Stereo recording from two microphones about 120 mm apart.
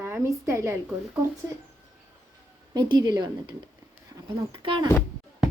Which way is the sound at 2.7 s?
35° right (ahead or behind).